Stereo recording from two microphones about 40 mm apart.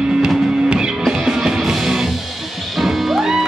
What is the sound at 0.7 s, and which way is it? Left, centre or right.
Music, centre.